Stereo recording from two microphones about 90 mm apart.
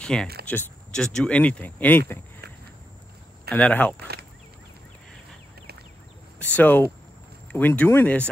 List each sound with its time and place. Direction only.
0.0 s speech: 10° left (ahead or behind)
3.5 s speech: 10° left (ahead or behind)
6.4 s speech: 20° left (ahead or behind)